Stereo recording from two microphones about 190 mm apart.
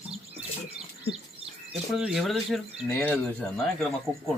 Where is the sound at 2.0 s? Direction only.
Centre (ahead or behind).